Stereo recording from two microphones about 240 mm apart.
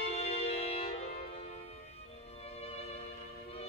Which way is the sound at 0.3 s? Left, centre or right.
Left.